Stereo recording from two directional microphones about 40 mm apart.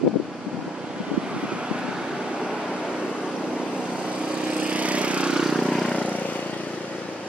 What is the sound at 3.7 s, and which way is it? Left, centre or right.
Lawn mower, right.